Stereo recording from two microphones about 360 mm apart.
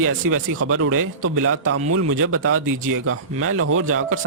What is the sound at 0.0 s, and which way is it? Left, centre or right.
Speech, right.